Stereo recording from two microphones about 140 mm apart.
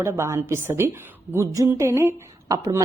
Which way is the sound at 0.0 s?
20° right (ahead or behind).